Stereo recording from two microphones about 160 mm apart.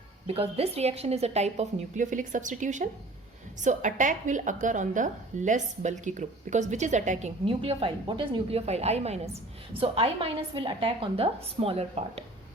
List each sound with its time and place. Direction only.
0.3 s a woman's voice: 35° right (ahead or behind)